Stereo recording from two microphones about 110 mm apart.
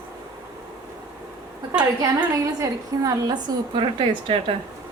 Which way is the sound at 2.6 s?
30° right (ahead or behind).